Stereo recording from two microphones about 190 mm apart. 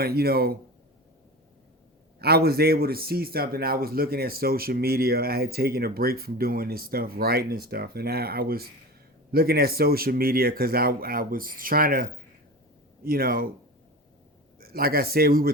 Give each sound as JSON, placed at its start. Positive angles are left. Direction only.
{"t": 0.0, "sound": "speech", "side_deg": -55}
{"t": 2.1, "sound": "speech", "side_deg": -55}
{"t": 13.1, "sound": "speech", "side_deg": -50}
{"t": 14.6, "sound": "speech", "side_deg": -50}